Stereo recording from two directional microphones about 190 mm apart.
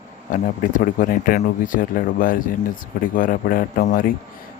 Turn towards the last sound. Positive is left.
turn(degrees=45)  # may be behind; listen again after turning